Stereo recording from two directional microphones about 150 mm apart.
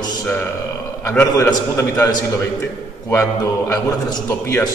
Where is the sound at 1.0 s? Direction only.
15° left (ahead or behind).